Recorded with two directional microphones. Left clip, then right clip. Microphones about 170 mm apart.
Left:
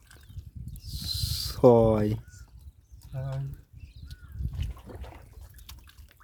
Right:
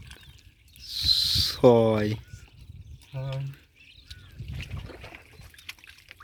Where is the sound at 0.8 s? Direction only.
15° left (ahead or behind).